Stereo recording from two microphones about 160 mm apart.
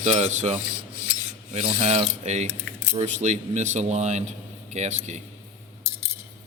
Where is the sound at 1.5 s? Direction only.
45° right (ahead or behind).